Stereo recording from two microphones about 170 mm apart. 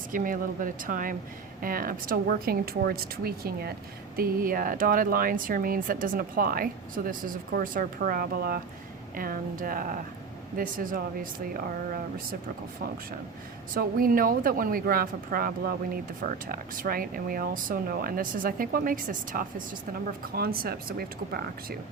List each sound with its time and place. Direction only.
0.1 s speech: 55° right (ahead or behind)
13.7 s speech: 55° right (ahead or behind)